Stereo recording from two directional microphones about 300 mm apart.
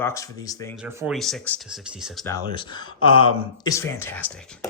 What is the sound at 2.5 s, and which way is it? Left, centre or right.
Speech, centre.